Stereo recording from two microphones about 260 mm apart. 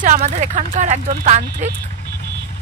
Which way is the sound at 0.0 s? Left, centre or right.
Right.